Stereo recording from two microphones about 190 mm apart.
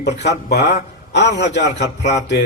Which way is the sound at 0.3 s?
60° left (ahead or behind).